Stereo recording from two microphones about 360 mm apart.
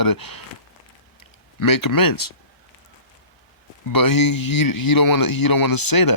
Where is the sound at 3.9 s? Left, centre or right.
Left.